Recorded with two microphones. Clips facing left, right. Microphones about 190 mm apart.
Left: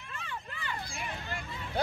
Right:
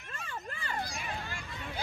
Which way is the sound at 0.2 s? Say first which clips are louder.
Right 1 dB; 40° right (ahead or behind).